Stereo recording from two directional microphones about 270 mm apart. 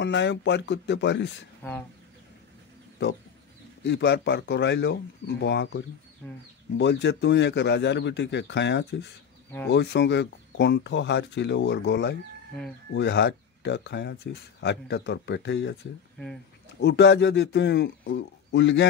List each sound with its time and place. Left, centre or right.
0.0 s speech: left
1.6 s speech: centre
3.8 s speech: left
16.8 s speech: left